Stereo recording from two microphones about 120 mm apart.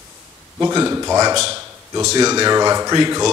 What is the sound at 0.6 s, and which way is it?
Speech, 25° right (ahead or behind).